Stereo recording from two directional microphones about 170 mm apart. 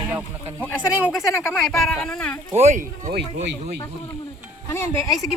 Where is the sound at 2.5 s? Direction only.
45° right (ahead or behind).